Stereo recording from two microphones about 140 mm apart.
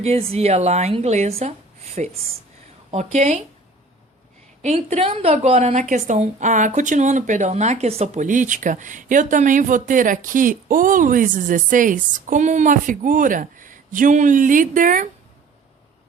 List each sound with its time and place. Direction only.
0.0 s a woman's voice: 50° right (ahead or behind)
4.6 s a woman's voice: 50° right (ahead or behind); by 15.1 s 70° right (ahead or behind)